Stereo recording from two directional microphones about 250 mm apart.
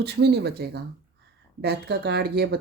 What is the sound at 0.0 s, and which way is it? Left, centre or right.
Speech, right.